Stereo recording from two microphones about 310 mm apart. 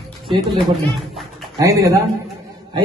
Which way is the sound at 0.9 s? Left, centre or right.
Centre.